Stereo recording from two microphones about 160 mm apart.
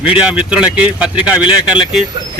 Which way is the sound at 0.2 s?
5° right (ahead or behind).